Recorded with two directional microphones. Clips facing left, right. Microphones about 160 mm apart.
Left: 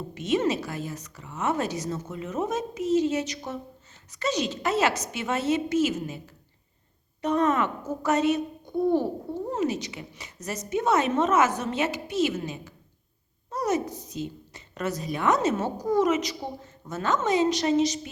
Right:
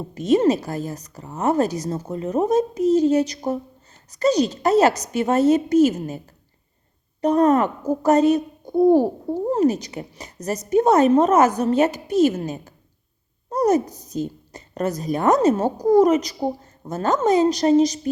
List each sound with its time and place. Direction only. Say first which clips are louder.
0.1 s a woman's voice: right 8 dB; 40° right (ahead or behind)